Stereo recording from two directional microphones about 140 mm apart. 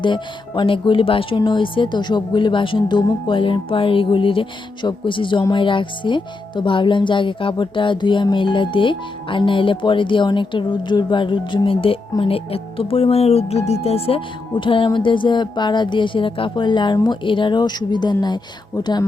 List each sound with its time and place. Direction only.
0.0 s speech: 35° left (ahead or behind)